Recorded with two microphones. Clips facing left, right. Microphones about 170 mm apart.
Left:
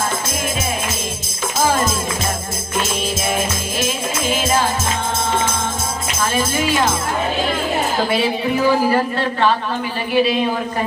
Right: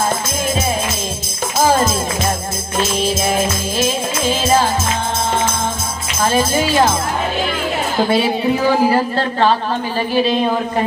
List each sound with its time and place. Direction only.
6.3 s speech: 30° right (ahead or behind)
10.1 s speech: 35° right (ahead or behind)